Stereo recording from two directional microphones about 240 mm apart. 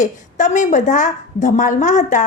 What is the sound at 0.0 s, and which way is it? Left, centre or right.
A woman's voice, left.